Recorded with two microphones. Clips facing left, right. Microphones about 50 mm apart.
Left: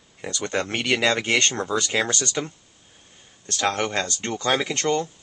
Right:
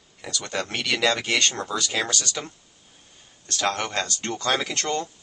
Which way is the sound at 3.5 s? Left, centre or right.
Left.